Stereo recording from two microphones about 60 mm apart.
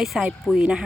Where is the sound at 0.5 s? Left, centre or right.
Centre.